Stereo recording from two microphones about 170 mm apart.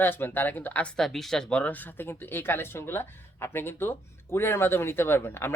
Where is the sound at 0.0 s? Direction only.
10° left (ahead or behind).